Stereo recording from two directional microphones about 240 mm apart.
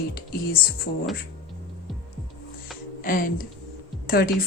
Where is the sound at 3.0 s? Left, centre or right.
Left.